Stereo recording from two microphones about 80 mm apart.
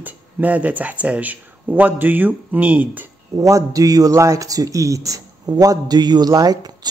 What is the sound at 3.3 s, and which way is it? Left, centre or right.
Speech, right.